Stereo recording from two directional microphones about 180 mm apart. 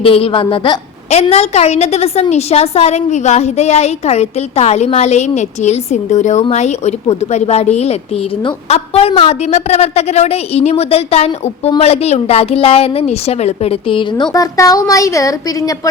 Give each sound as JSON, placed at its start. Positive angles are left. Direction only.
{"t": 0.0, "sound": "a woman's voice", "side_deg": 30}